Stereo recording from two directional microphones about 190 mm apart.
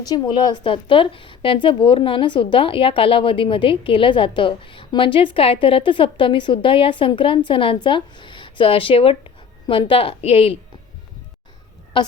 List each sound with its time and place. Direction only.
0.0 s a woman's voice: 20° left (ahead or behind)
11.9 s a woman's voice: 25° left (ahead or behind)